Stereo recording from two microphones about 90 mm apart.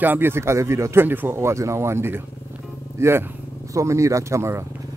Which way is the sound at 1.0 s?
20° right (ahead or behind).